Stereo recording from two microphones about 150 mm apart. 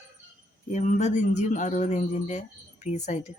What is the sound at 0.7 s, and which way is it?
A woman's voice, 50° left (ahead or behind).